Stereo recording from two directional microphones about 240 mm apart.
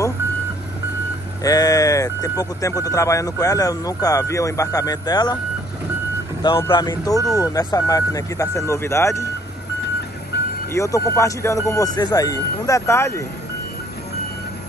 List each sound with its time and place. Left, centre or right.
1.4 s speech: centre
6.4 s speech: centre
10.7 s speech: centre